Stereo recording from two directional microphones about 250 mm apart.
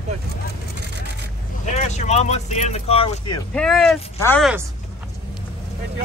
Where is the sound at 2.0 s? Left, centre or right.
Left.